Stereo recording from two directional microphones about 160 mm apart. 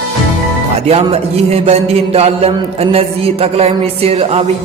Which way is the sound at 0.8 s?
40° right (ahead or behind).